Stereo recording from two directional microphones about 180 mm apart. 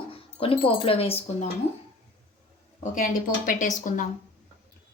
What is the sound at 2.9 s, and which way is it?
A woman's voice, 50° left (ahead or behind).